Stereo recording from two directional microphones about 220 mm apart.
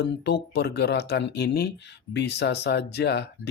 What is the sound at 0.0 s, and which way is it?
Speech, 50° left (ahead or behind).